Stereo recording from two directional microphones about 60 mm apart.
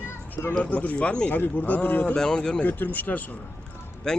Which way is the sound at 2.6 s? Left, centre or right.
Left.